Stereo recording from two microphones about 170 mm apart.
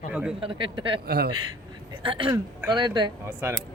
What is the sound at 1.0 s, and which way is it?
Speech, 65° right (ahead or behind).